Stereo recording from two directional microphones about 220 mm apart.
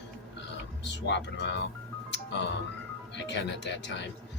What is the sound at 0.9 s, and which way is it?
Speech, 55° left (ahead or behind).